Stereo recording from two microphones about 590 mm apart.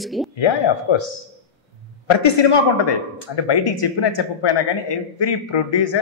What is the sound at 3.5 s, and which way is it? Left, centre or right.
Speech, left.